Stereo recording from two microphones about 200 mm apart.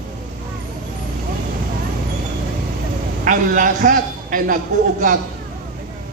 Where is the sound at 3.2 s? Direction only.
45° right (ahead or behind).